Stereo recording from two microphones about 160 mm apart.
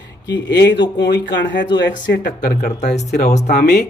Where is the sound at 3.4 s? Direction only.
90° left.